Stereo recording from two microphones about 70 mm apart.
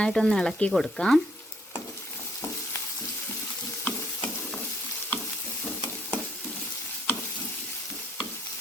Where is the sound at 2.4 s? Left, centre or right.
Left.